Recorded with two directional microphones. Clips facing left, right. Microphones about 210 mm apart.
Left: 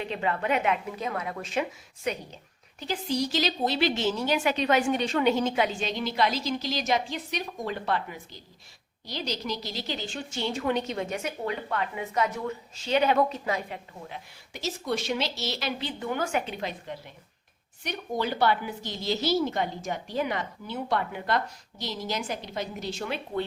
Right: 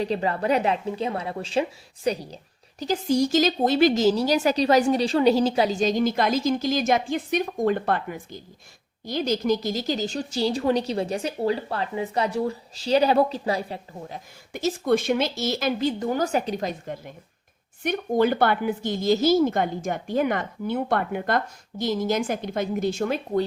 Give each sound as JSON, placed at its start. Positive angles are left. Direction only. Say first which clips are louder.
{"t": 0.0, "sound": "a woman's voice", "louder": "right 5 dB", "side_deg": -35}
{"t": 14.5, "sound": "a woman's voice", "louder": "right 9 dB", "side_deg": -50}